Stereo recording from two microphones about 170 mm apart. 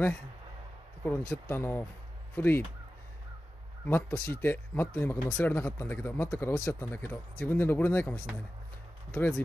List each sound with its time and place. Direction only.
1.0 s speech: 10° left (ahead or behind)
3.8 s speech: 10° left (ahead or behind)